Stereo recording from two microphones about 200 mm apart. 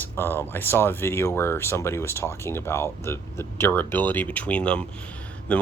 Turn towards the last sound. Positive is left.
turn(degrees=5)  # may be behind; listen again after turning